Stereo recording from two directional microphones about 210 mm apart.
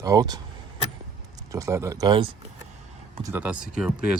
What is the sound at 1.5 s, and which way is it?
Speech, 15° right (ahead or behind).